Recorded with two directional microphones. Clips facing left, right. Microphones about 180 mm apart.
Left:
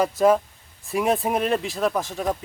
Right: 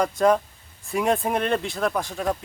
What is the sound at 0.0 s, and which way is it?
Speech, 5° left (ahead or behind).